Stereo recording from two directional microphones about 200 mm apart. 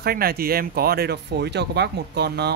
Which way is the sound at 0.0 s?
50° right (ahead or behind).